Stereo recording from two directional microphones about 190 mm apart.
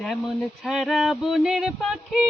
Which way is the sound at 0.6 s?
Centre (ahead or behind).